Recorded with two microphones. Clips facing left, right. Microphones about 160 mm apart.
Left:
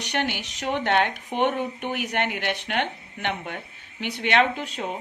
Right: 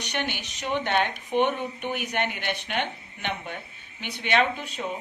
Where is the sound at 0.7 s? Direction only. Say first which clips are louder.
Left 2 dB; 70° left (ahead or behind).